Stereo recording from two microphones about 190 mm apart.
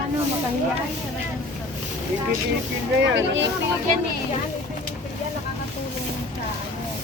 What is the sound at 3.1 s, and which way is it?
Speech, 75° right (ahead or behind).